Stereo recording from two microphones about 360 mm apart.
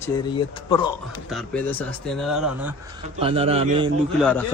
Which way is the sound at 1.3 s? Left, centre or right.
Centre.